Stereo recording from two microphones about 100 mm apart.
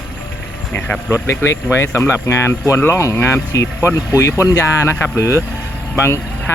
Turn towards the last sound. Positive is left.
turn(degrees=25)  # may be behind; listen again after turning